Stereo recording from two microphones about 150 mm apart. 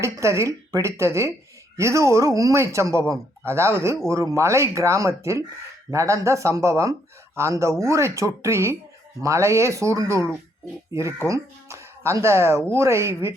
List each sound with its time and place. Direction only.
0.0 s speech: 20° right (ahead or behind)